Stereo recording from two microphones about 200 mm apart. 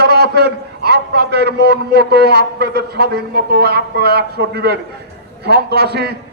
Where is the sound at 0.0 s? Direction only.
55° right (ahead or behind).